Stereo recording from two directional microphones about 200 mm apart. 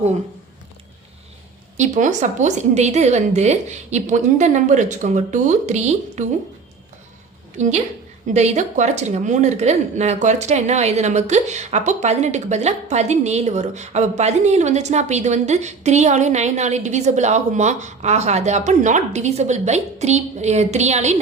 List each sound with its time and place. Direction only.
1.7 s speech: 35° right (ahead or behind)
7.6 s speech: 35° right (ahead or behind)